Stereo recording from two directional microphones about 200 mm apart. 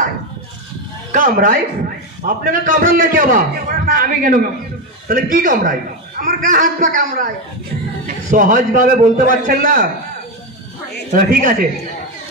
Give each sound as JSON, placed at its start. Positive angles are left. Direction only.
{"t": 1.1, "sound": "a man's voice", "side_deg": -40}
{"t": 8.3, "sound": "a man's voice", "side_deg": -40}
{"t": 11.1, "sound": "a man's voice", "side_deg": -45}